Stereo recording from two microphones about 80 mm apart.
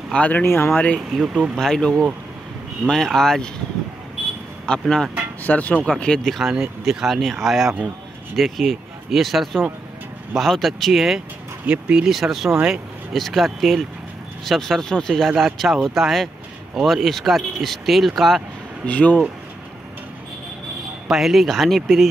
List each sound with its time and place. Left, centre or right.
0.1 s speech: centre
1.1 s speech: centre
1.6 s speech: centre
4.6 s speech: centre
5.4 s speech: left
5.9 s speech: centre
18.9 s speech: centre
21.1 s speech: centre